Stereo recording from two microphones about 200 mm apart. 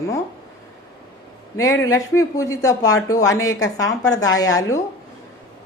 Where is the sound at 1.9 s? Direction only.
15° left (ahead or behind).